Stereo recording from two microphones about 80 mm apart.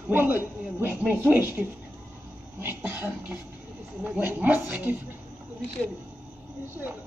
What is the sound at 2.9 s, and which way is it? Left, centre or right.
Speech, right.